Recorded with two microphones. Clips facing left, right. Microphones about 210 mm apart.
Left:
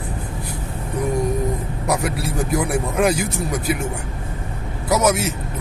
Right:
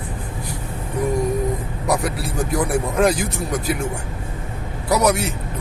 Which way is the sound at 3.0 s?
Centre (ahead or behind).